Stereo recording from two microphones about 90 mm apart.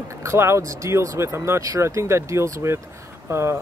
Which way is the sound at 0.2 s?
30° right (ahead or behind).